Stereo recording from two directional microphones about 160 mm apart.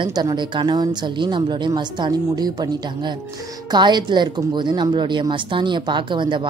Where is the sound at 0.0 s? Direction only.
25° right (ahead or behind).